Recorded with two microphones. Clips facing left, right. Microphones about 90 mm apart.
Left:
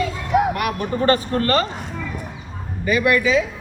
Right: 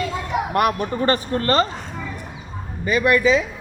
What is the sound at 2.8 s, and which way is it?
Speech, 25° right (ahead or behind).